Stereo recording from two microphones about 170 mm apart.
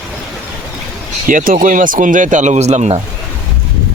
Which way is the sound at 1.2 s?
50° right (ahead or behind).